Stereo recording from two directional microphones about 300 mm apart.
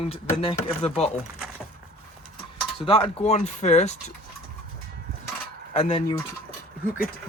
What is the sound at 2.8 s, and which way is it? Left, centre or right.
Speech, centre.